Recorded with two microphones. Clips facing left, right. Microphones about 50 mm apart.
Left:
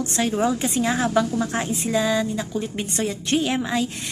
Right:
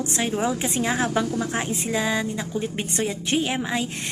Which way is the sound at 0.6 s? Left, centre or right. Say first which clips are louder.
Left 2 dB; right.